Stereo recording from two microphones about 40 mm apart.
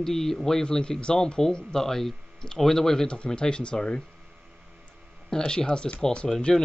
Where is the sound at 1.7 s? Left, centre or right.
Centre.